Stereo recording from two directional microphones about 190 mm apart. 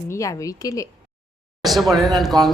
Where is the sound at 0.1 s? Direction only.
15° left (ahead or behind).